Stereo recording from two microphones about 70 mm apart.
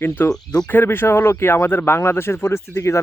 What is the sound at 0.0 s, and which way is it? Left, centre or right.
Speech, left.